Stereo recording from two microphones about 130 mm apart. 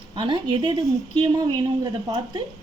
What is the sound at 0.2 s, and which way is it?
Speech, 40° right (ahead or behind).